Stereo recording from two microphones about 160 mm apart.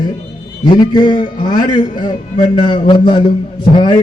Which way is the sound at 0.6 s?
30° left (ahead or behind).